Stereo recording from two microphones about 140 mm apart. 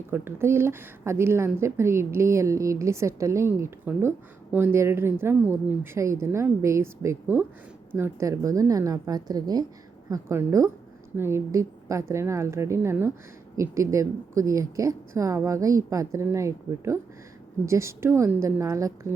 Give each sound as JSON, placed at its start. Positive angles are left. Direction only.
{"t": 0.1, "sound": "a woman's voice", "side_deg": -15}